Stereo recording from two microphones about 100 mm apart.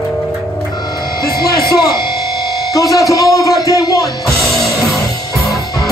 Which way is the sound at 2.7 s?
35° left (ahead or behind).